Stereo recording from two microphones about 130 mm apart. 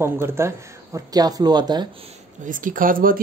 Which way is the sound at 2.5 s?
90° right.